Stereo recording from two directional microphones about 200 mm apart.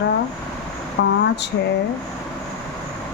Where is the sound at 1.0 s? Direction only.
60° left (ahead or behind).